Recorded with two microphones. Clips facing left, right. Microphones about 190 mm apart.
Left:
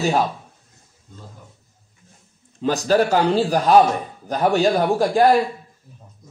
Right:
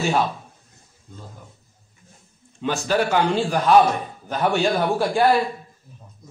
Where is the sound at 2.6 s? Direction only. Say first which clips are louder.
Left 4 dB; 40° left (ahead or behind).